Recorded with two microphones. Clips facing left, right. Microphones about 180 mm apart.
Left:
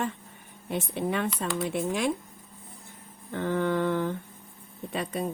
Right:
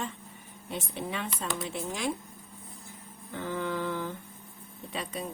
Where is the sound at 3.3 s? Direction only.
60° left (ahead or behind).